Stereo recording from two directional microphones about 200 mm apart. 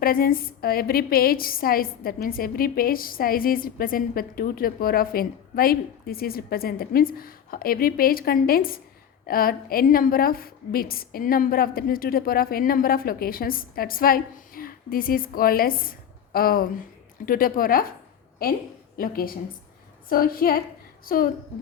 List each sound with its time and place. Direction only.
0.0 s a woman's voice: 45° left (ahead or behind)